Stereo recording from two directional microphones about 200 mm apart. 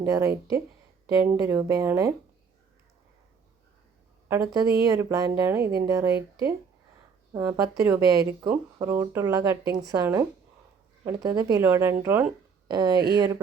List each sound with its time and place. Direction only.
0.0 s a woman's voice: 15° right (ahead or behind)
4.3 s a woman's voice: 15° right (ahead or behind)
6.1 s speech: 55° right (ahead or behind)
7.3 s a woman's voice: 15° right (ahead or behind)